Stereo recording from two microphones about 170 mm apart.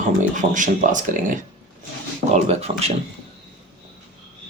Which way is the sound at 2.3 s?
40° right (ahead or behind).